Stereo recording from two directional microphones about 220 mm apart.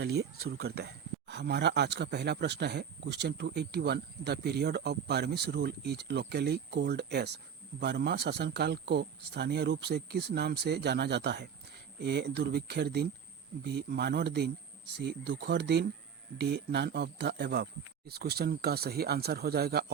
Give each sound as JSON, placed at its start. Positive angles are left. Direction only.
{"t": 0.0, "sound": "speech", "side_deg": -50}